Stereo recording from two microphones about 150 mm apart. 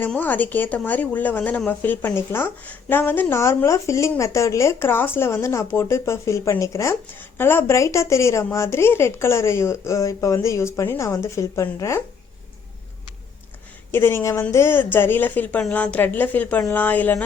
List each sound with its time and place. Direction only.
0.0 s speech: 10° left (ahead or behind)
13.9 s speech: 15° left (ahead or behind)